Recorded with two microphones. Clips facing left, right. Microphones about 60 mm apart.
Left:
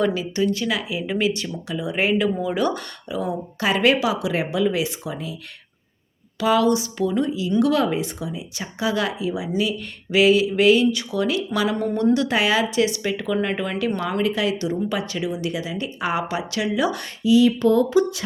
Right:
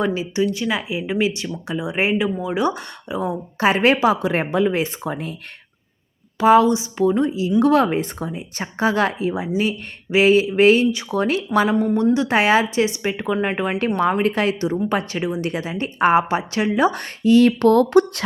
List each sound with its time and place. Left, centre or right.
0.0 s speech: right
6.4 s speech: right
17.2 s speech: right